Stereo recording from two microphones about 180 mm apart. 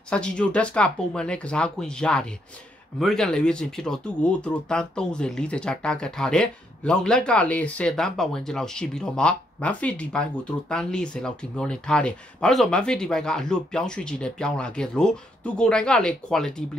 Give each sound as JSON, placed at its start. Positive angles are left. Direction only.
{"t": 0.1, "sound": "speech", "side_deg": 5}